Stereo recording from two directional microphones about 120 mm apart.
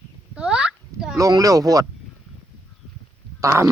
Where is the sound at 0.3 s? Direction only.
10° right (ahead or behind).